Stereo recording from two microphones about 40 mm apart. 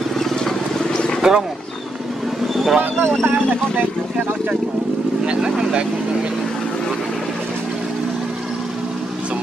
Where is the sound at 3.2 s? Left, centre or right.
Right.